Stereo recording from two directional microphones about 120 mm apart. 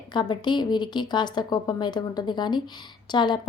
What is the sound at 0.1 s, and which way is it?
A woman's voice, 40° left (ahead or behind).